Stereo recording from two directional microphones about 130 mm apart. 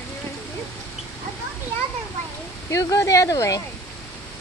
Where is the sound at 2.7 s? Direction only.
25° left (ahead or behind).